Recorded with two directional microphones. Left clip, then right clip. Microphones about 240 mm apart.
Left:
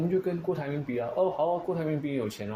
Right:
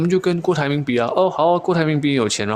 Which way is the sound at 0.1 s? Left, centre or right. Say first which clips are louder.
Right 10 dB; right.